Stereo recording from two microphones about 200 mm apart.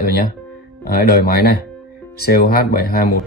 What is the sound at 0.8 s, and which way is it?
A man's voice, 50° left (ahead or behind).